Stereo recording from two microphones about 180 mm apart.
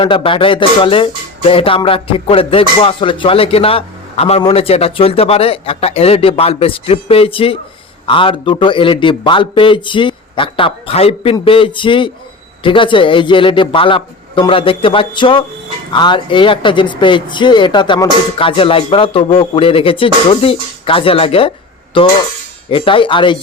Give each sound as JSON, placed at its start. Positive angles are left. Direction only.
{"t": 0.0, "sound": "speech", "side_deg": 30}